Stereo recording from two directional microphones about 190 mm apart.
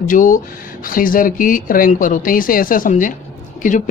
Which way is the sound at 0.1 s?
45° left (ahead or behind).